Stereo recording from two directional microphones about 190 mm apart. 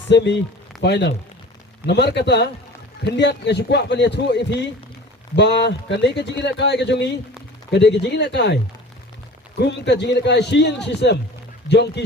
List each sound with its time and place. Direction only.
0.1 s speech: 65° left (ahead or behind)
9.6 s speech: 65° left (ahead or behind)